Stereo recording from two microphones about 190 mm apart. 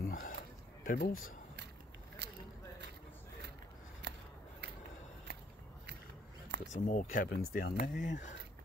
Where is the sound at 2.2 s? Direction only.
60° right (ahead or behind).